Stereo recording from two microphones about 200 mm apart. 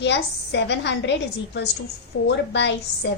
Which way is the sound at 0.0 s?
60° left (ahead or behind).